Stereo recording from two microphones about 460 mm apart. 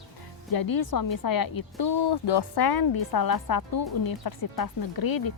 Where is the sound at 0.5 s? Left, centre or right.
Left.